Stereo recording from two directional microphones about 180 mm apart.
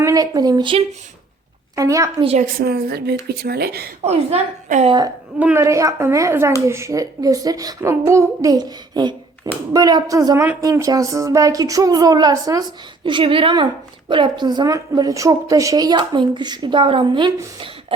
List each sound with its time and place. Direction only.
0.0 s a woman's voice: 20° right (ahead or behind)
2.2 s a woman's voice: 35° right (ahead or behind)
2.6 s a woman's voice: 60° right (ahead or behind)
4.0 s a woman's voice: 35° right (ahead or behind)
5.4 s a woman's voice: 10° right (ahead or behind); by 17.9 s 25° right (ahead or behind)